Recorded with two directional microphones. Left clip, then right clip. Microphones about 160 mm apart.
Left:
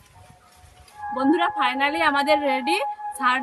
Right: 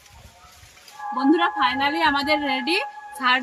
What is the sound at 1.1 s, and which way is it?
A woman's voice, 10° left (ahead or behind).